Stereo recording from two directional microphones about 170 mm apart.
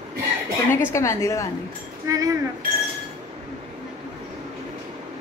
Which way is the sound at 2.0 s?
20° right (ahead or behind).